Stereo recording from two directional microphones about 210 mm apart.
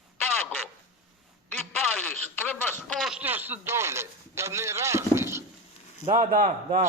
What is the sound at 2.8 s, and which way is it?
A man's voice, centre (ahead or behind).